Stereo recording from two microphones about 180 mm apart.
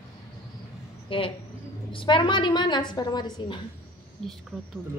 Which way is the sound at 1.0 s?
30° left (ahead or behind).